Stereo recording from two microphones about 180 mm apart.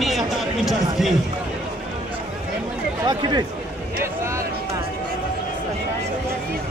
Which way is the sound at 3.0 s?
25° right (ahead or behind).